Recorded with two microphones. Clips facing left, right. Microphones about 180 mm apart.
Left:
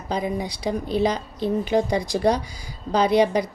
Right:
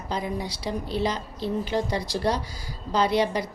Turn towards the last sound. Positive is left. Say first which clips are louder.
# left 4 dB
turn(degrees=15)  # may be behind; listen again after turning